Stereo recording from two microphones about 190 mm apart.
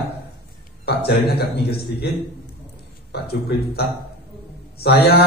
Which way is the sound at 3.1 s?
55° left (ahead or behind).